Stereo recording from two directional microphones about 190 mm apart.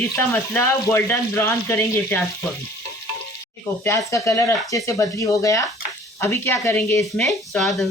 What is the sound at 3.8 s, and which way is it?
Speech, 15° left (ahead or behind).